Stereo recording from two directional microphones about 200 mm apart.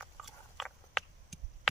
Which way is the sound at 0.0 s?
Centre (ahead or behind).